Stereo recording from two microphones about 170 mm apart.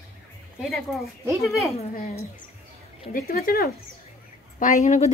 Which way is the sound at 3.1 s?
60° left (ahead or behind).